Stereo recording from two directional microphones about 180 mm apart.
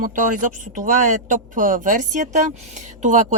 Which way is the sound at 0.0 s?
45° right (ahead or behind).